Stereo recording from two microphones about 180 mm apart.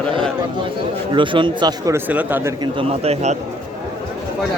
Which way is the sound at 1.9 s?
10° right (ahead or behind).